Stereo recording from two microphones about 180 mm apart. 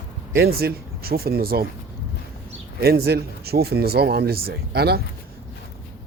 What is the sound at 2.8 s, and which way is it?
Speech, 60° right (ahead or behind).